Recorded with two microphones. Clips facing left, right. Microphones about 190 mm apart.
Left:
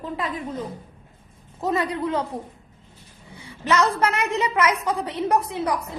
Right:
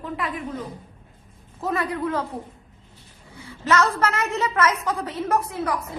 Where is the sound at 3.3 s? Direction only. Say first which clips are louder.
Right 1 dB; 15° left (ahead or behind).